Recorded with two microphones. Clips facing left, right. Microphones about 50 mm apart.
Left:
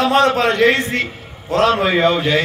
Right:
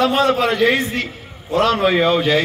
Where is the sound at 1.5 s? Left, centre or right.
Left.